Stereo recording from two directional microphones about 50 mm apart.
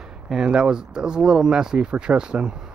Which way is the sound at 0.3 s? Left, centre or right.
Centre.